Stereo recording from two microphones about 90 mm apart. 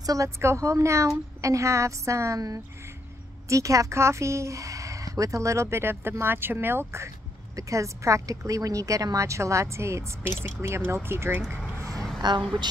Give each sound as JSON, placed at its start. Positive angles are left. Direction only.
{"t": 0.0, "sound": "speech", "side_deg": -40}
{"t": 12.2, "sound": "speech", "side_deg": -55}